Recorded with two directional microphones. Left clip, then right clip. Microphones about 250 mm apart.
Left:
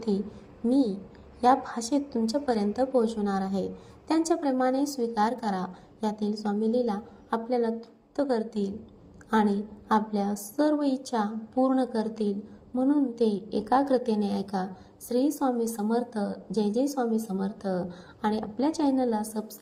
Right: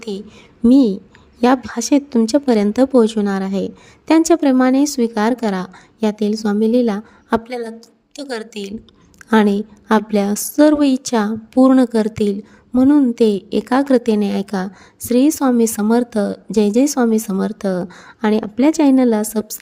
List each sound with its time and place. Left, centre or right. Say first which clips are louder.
0.7 s a woman's voice: right 12 dB; right